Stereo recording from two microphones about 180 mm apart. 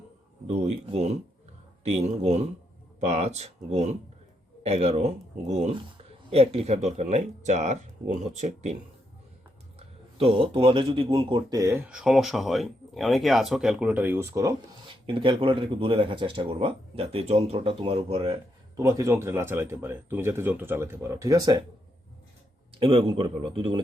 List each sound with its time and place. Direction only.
0.4 s speech: 35° right (ahead or behind); by 14.9 s 15° right (ahead or behind)
15.0 s speech: 30° right (ahead or behind)
18.8 s speech: 15° right (ahead or behind)
22.7 s speech: 30° right (ahead or behind)